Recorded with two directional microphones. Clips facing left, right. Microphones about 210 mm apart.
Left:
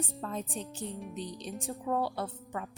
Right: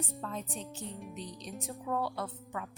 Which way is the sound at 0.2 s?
35° left (ahead or behind).